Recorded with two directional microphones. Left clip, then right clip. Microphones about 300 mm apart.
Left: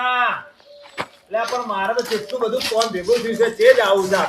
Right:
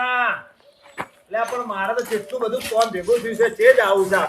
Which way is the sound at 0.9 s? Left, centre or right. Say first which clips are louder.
Left 1 dB; centre.